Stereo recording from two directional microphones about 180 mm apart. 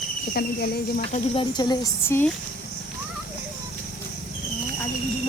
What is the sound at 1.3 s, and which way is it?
Speech, 25° left (ahead or behind).